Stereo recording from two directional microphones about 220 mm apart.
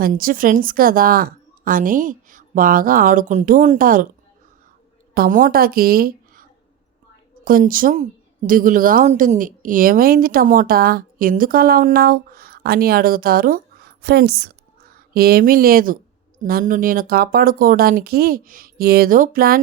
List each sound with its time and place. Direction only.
0.0 s a woman's voice: 40° right (ahead or behind)
5.1 s a woman's voice: 40° right (ahead or behind)
7.4 s a woman's voice: 40° right (ahead or behind)